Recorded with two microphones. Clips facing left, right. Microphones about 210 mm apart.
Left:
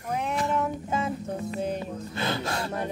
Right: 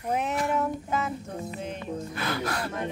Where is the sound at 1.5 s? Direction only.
35° left (ahead or behind).